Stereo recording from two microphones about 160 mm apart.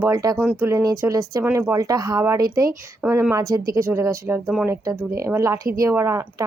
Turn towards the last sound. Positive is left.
turn(degrees=-15)  # may be behind; listen again after turning